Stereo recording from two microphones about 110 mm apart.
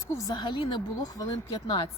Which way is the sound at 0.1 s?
35° left (ahead or behind).